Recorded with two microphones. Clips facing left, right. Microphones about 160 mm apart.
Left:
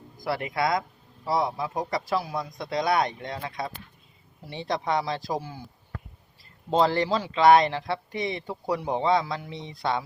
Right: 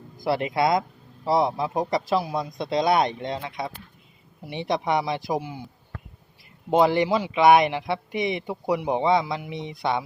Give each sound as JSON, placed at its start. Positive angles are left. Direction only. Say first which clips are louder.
{"t": 0.3, "sound": "a man's voice", "louder": "right 4 dB", "side_deg": -25}
{"t": 6.7, "sound": "speech", "louder": "right 3 dB", "side_deg": -15}